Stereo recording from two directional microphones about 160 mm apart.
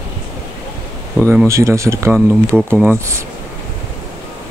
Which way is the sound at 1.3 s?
15° right (ahead or behind).